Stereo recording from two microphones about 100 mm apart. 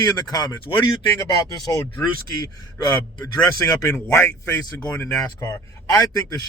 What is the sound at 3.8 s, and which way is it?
A man's voice, 25° left (ahead or behind).